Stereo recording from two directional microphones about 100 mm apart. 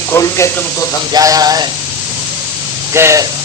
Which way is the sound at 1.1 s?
35° right (ahead or behind).